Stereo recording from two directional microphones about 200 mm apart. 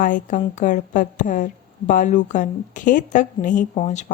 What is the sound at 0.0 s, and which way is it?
Speech, 40° left (ahead or behind).